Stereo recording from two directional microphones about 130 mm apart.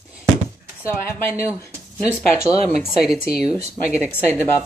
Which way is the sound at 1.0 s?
20° left (ahead or behind).